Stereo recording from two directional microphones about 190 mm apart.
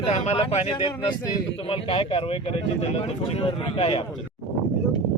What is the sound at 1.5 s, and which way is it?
Speech, 30° left (ahead or behind).